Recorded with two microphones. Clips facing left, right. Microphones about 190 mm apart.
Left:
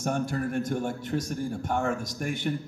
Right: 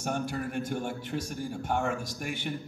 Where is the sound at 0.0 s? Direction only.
45° left (ahead or behind).